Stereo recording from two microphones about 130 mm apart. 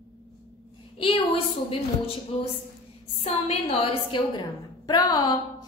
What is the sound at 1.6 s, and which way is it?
A woman's voice, 45° left (ahead or behind).